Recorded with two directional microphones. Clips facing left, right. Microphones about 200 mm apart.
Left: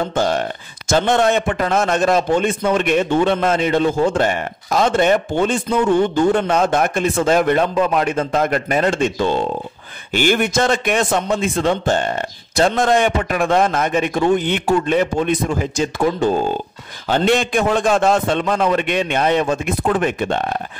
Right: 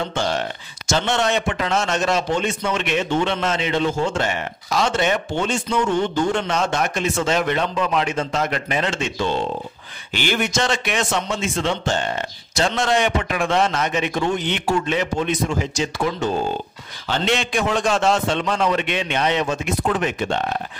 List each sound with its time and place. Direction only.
0.0 s a man's voice: 50° left (ahead or behind)